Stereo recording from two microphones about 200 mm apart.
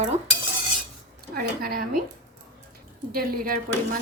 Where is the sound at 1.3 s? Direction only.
50° right (ahead or behind).